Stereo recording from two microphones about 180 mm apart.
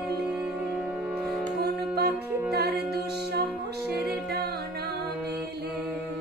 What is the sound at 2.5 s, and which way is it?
Music, 60° right (ahead or behind).